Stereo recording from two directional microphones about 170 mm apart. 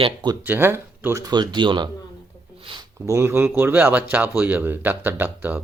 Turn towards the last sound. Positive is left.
turn(degrees=-10)  # may be behind; listen again after turning